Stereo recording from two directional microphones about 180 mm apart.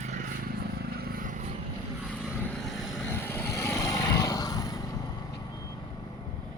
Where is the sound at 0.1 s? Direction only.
50° right (ahead or behind).